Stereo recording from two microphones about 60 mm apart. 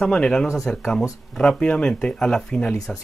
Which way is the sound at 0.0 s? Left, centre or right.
Centre.